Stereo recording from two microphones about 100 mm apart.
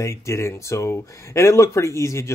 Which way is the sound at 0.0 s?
30° left (ahead or behind).